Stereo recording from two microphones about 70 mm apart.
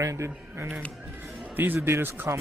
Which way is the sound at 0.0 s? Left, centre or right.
Right.